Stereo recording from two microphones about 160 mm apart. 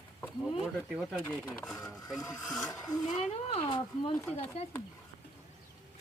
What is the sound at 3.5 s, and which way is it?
Speech, 35° left (ahead or behind).